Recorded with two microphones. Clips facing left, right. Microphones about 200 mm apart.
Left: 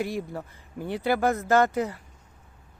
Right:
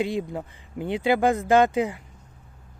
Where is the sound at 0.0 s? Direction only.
20° right (ahead or behind).